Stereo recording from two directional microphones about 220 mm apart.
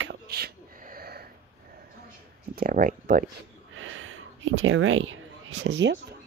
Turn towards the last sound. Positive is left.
turn(degrees=-55)  # may be behind; listen again after turning